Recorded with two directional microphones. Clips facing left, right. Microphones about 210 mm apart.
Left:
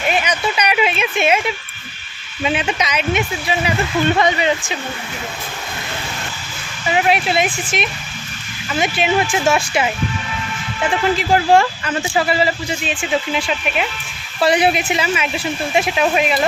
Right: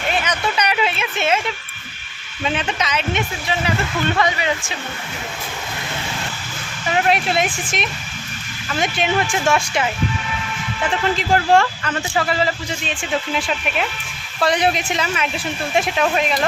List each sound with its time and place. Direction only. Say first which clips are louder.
0.1 s a sound: left 2 dB; 15° left (ahead or behind)
2.4 s speech: left 3 dB; 10° left (ahead or behind)
4.2 s speech: left 4 dB; 25° left (ahead or behind)
6.9 s speech: left 2 dB; 5° left (ahead or behind)
11.2 s speech: left 1 dB; 10° left (ahead or behind)